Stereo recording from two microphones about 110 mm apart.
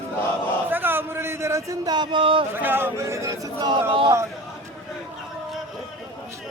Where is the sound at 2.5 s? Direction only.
20° right (ahead or behind); by 4.1 s 50° right (ahead or behind).